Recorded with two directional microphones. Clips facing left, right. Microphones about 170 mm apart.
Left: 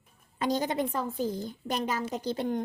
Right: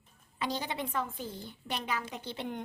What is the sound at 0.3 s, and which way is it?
A woman's voice, 45° left (ahead or behind).